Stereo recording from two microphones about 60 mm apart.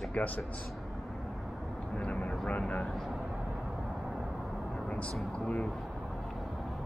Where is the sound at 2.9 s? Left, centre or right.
Centre.